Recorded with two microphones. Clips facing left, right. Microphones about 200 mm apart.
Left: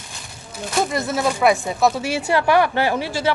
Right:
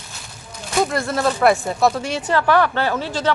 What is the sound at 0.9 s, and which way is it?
Speech, 5° left (ahead or behind).